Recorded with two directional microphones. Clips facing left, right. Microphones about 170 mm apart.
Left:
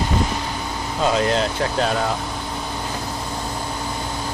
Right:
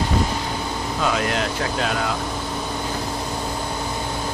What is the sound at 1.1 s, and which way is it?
Speech, 30° left (ahead or behind).